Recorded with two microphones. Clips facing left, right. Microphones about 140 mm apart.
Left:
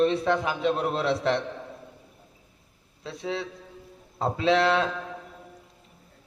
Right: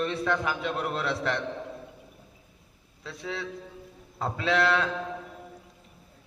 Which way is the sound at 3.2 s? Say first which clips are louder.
Left 3 dB; 30° left (ahead or behind).